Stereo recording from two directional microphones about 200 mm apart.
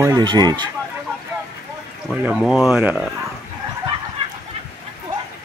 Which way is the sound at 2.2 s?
Centre (ahead or behind).